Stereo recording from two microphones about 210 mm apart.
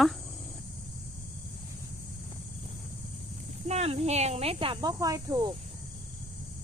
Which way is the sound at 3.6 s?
30° right (ahead or behind).